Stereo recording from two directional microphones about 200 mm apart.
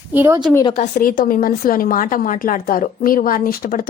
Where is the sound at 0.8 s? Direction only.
40° left (ahead or behind).